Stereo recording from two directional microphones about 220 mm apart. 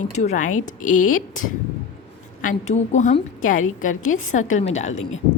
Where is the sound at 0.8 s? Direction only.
80° left.